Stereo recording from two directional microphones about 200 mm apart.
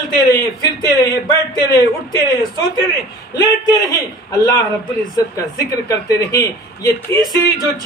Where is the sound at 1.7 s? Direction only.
20° left (ahead or behind).